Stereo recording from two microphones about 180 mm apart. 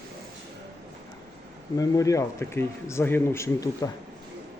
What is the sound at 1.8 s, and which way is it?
Speech, 20° left (ahead or behind).